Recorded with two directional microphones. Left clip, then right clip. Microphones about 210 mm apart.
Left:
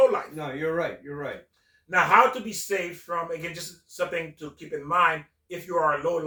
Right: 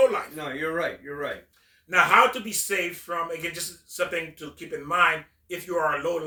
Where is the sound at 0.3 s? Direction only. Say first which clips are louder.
Even; 5° left (ahead or behind).